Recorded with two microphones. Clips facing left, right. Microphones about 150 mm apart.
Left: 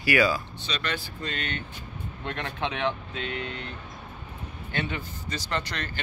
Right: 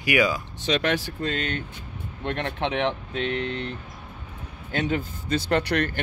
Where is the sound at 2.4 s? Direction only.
25° right (ahead or behind).